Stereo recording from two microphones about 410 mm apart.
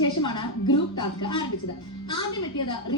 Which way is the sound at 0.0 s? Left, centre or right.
Centre.